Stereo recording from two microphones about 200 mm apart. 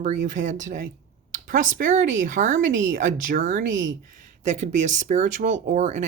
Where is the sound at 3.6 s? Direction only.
70° right (ahead or behind).